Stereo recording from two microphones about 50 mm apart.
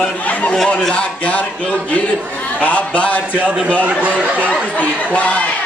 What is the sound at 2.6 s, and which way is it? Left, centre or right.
Music, left.